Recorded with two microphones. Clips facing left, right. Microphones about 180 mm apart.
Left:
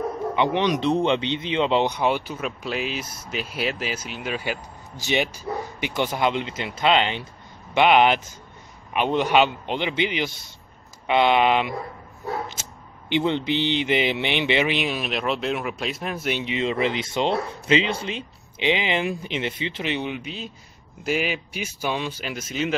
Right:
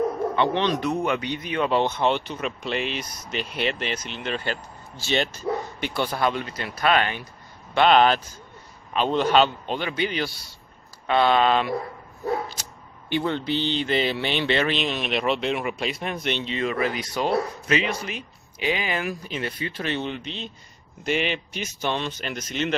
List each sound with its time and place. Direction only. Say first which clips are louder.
0.4 s speech: left 2 dB; 15° left (ahead or behind)
0.8 s speech: left 4 dB; 25° left (ahead or behind)
13.1 s speech: left 2 dB; 20° left (ahead or behind)